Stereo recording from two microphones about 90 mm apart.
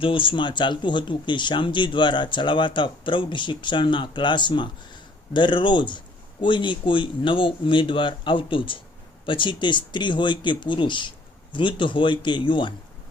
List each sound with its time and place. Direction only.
0.0 s speech: 75° left (ahead or behind)